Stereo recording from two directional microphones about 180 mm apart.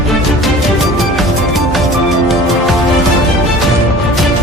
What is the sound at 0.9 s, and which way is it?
Music, centre (ahead or behind).